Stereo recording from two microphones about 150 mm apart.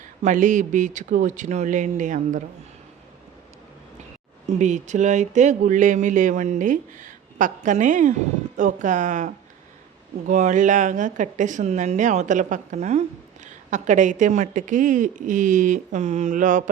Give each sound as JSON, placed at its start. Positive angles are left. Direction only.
{"t": 0.2, "sound": "speech", "side_deg": -55}
{"t": 4.4, "sound": "speech", "side_deg": -50}